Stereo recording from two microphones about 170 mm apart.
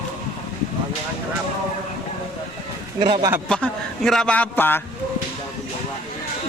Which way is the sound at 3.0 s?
30° right (ahead or behind).